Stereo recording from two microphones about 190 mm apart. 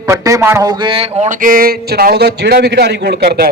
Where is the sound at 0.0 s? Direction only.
15° right (ahead or behind).